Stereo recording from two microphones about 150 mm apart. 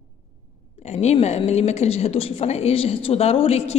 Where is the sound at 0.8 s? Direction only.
45° left (ahead or behind).